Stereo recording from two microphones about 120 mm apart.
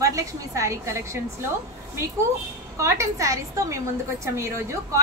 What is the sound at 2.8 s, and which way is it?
A woman's voice, 25° right (ahead or behind).